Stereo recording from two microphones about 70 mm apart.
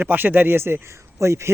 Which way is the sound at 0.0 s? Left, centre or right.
Right.